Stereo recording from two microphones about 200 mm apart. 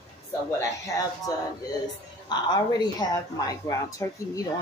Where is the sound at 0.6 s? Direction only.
15° left (ahead or behind).